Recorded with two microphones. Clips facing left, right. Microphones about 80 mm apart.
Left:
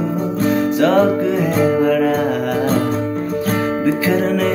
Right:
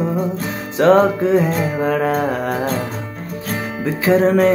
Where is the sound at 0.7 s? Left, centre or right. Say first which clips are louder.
Right 4 dB; right.